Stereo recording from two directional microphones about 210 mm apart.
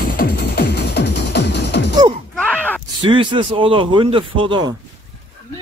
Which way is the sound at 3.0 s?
25° right (ahead or behind).